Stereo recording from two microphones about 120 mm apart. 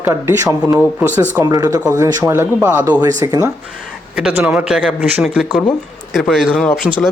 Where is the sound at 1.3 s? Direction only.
30° right (ahead or behind).